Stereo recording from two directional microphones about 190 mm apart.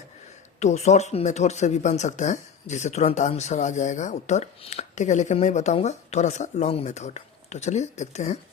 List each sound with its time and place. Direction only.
0.6 s speech: 35° left (ahead or behind)